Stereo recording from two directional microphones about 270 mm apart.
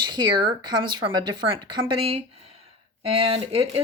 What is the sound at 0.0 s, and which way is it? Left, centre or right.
Speech, centre.